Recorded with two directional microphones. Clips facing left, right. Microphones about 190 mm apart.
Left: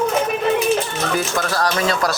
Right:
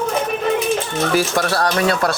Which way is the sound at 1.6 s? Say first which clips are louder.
Right 1 dB; 60° right (ahead or behind).